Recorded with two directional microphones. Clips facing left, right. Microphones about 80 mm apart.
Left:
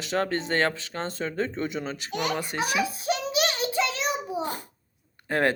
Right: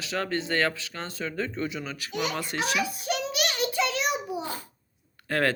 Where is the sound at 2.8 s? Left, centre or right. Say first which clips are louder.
Left 2 dB; left.